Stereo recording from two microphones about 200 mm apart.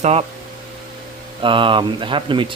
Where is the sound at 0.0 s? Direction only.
30° right (ahead or behind).